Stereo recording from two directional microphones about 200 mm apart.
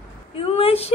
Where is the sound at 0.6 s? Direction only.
30° left (ahead or behind).